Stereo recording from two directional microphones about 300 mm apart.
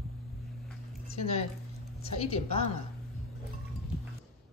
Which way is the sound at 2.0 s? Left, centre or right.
Centre.